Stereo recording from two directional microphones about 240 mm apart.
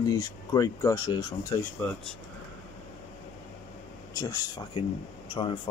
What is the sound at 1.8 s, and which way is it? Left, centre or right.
Speech, centre.